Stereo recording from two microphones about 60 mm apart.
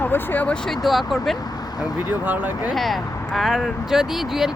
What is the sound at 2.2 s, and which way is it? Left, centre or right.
Speech, right.